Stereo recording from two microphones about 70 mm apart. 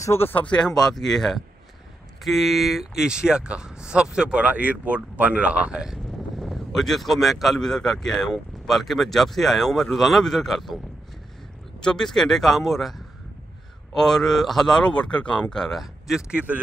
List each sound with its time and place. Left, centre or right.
0.0 s speech: left
0.3 s speech: left
0.6 s speech: centre
6.3 s speech: centre
11.8 s speech: centre
13.9 s speech: centre
16.2 s speech: centre